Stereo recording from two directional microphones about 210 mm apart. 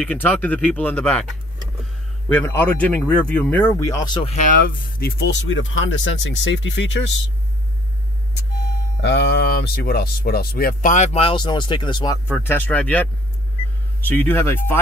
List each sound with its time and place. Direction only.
0.0 s speech: 5° left (ahead or behind)
2.3 s speech: 10° left (ahead or behind); by 7.2 s 60° left (ahead or behind)
9.0 s speech: 55° left (ahead or behind); by 12.2 s 20° left (ahead or behind)
12.3 s speech: 10° left (ahead or behind)